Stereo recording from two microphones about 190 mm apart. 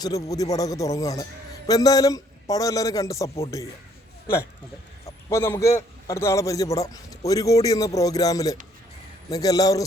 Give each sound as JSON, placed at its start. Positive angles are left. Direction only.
{"t": 0.0, "sound": "a man's voice", "side_deg": 20}
{"t": 5.0, "sound": "a man's voice", "side_deg": 15}